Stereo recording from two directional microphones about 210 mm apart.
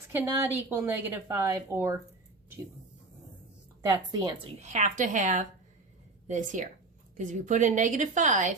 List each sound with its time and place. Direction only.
0.1 s speech: 10° right (ahead or behind)
3.8 s speech: 15° right (ahead or behind)
4.6 s a woman's voice: 30° right (ahead or behind)